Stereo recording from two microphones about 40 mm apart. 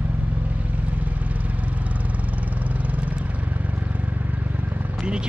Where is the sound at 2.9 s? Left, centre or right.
Right.